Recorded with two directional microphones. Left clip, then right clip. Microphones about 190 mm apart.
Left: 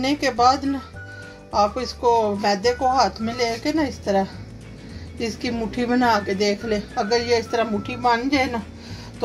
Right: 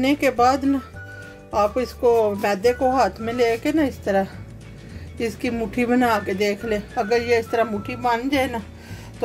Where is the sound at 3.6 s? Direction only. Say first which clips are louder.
Right 2 dB; 40° right (ahead or behind).